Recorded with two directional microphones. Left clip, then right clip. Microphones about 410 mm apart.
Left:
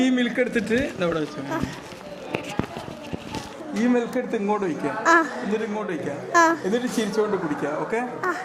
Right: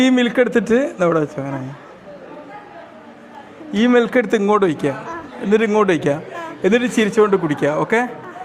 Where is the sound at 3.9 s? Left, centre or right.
Right.